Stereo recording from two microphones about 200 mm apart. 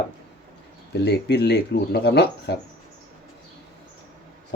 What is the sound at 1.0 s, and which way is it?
Speech, 55° left (ahead or behind).